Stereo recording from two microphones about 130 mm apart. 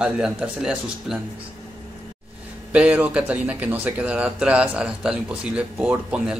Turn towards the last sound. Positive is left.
turn(degrees=-10)  # may be behind; listen again after turning